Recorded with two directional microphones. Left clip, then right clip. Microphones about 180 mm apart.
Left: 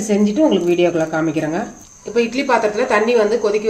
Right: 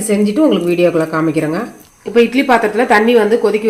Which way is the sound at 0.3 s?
30° right (ahead or behind).